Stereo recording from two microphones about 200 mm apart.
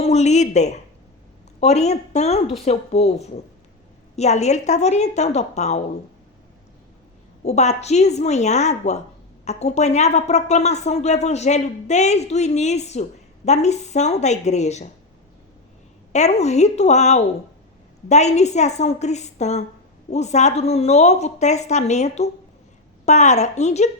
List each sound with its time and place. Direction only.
0.0 s a woman's voice: 35° left (ahead or behind)
7.4 s a woman's voice: 35° left (ahead or behind)
16.1 s a woman's voice: 35° left (ahead or behind)